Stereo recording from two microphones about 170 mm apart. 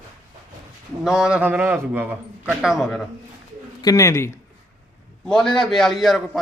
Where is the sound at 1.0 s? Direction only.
5° right (ahead or behind).